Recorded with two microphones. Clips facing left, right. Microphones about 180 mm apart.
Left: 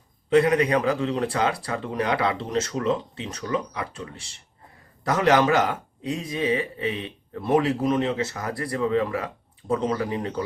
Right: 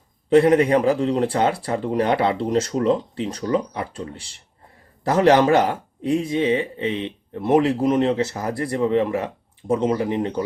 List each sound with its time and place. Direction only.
0.3 s speech: 30° right (ahead or behind)